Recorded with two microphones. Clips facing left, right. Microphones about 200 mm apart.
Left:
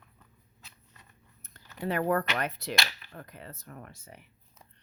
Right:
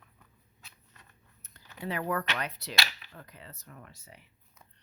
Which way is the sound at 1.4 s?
50° left (ahead or behind).